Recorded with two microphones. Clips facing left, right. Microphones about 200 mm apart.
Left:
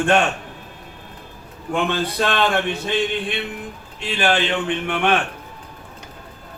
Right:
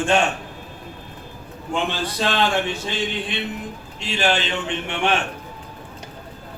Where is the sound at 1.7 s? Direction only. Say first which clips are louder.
Left 3 dB; 55° left (ahead or behind).